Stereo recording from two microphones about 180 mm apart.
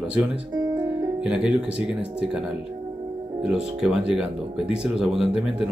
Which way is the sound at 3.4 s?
5° right (ahead or behind).